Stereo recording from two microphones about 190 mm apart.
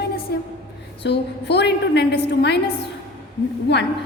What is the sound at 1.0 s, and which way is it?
A woman's voice, 60° left (ahead or behind).